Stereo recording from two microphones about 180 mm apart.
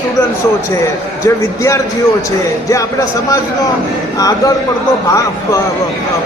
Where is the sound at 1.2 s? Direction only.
15° left (ahead or behind).